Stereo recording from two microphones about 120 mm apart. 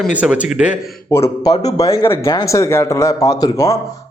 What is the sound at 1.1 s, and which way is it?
Speech, 25° left (ahead or behind).